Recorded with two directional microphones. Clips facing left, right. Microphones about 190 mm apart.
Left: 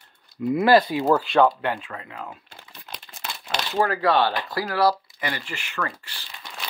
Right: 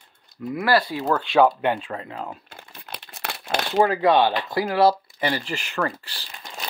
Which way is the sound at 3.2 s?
65° right (ahead or behind).